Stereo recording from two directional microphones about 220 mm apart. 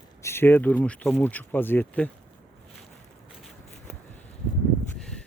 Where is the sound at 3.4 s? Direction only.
Centre (ahead or behind).